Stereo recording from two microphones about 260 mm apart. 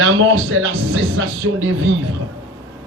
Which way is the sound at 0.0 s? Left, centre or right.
Right.